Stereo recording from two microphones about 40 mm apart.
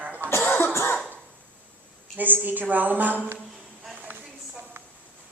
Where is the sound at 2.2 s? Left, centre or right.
Right.